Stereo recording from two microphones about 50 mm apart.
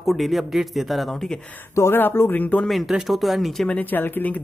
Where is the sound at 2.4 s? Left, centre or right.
Left.